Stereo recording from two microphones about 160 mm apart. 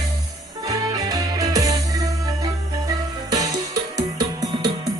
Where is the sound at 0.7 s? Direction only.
20° right (ahead or behind).